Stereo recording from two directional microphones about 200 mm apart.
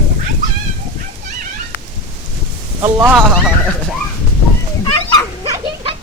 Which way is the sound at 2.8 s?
15° right (ahead or behind).